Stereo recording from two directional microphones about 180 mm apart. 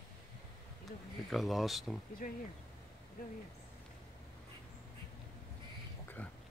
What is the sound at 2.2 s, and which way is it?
Speech, 45° left (ahead or behind).